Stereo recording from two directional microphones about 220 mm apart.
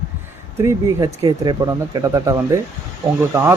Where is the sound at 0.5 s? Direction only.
15° right (ahead or behind).